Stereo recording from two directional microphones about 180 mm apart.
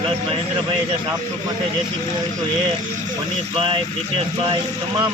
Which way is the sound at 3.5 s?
30° right (ahead or behind).